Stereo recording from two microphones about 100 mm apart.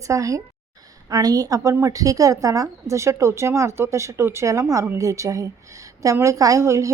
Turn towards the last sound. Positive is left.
turn(degrees=-30)  # may be behind; listen again after turning